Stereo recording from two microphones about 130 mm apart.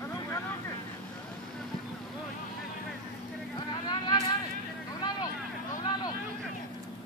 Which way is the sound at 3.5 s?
30° left (ahead or behind).